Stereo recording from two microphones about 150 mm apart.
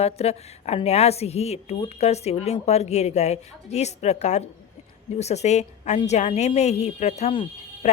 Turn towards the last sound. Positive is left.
turn(degrees=45)  # may be behind; listen again after turning